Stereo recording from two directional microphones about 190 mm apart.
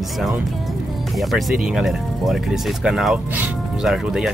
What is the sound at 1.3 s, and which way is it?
Speech, centre (ahead or behind).